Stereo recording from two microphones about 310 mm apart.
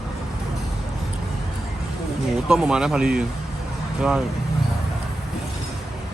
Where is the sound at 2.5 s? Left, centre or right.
Centre.